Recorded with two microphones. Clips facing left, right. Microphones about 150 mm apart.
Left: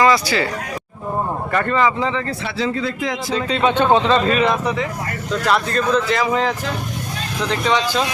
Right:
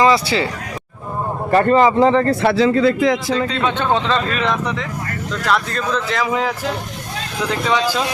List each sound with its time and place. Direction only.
0.0 s speech: 25° right (ahead or behind)
1.5 s speech: 35° right (ahead or behind); by 3.2 s 70° right (ahead or behind)
3.6 s speech: 10° left (ahead or behind); by 8.0 s 5° right (ahead or behind)